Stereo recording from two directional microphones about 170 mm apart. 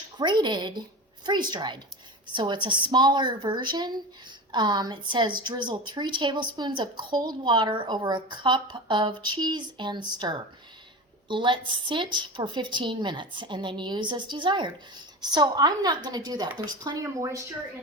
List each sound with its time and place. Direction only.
0.2 s a woman's voice: 25° right (ahead or behind)